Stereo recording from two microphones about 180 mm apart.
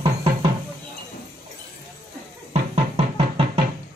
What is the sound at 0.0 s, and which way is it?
Music, 25° right (ahead or behind).